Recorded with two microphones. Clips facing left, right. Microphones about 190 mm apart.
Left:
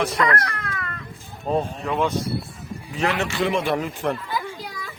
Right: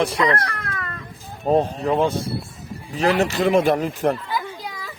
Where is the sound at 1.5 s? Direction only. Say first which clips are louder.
Right 5 dB; 40° right (ahead or behind).